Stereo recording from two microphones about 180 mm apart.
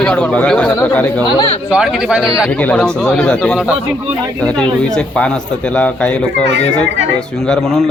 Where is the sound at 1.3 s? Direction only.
25° left (ahead or behind).